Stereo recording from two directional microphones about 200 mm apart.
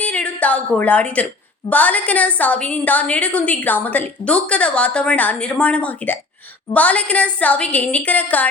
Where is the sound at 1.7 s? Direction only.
5° left (ahead or behind).